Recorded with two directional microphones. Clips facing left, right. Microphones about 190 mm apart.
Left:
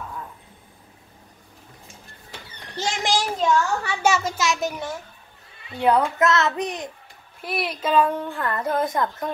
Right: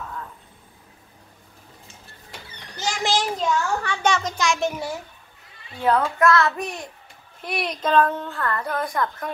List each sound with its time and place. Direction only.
0.0 s vehicle: 10° left (ahead or behind)
2.7 s a child's voice: 25° left (ahead or behind)
3.0 s a sound: 15° left (ahead or behind)
3.3 s a child's voice: 5° left (ahead or behind)
5.8 s a child's voice: 15° left (ahead or behind)
7.4 s a woman's voice: 5° left (ahead or behind); by 9.3 s 20° left (ahead or behind)